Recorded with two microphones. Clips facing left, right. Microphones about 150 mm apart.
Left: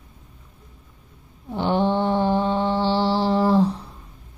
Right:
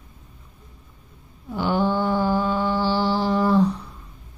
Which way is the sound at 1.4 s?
30° left (ahead or behind).